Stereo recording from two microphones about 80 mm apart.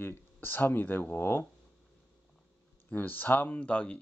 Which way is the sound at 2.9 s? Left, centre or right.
Left.